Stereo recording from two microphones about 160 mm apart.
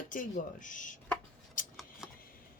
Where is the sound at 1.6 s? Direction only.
55° left (ahead or behind).